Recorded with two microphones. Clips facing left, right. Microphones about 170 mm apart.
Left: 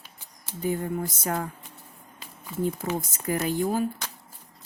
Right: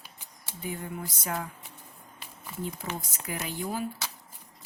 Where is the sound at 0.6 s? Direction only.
45° left (ahead or behind).